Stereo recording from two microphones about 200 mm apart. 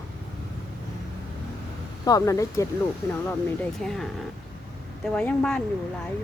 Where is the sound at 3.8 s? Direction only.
Centre (ahead or behind).